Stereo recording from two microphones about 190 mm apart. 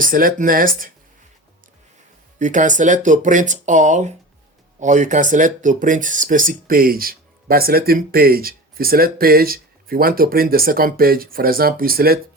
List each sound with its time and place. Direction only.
0.0 s speech: 45° right (ahead or behind)
2.4 s speech: 40° right (ahead or behind)